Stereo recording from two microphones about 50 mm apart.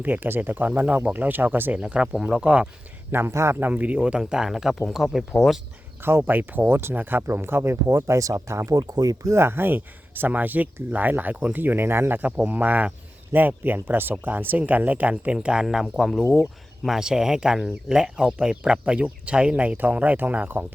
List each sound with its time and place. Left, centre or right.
0.0 s speech: right
1.7 s speech: right
3.1 s speech: right
3.7 s speech: right
4.2 s speech: centre
6.0 s speech: right
6.3 s speech: right
7.4 s speech: right
9.2 s speech: right
9.5 s speech: right
11.6 s speech: right
12.5 s speech: right
13.3 s speech: right
13.7 s speech: right